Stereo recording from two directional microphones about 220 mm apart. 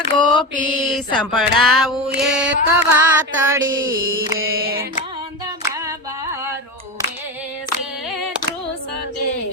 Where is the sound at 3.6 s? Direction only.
60° right (ahead or behind).